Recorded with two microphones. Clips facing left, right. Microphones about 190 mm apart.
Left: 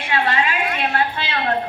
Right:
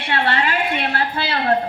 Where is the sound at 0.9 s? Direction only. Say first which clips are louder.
Even; 35° right (ahead or behind).